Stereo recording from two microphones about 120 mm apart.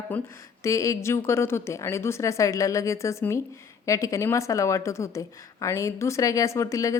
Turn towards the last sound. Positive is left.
turn(degrees=25)  # may be behind; listen again after turning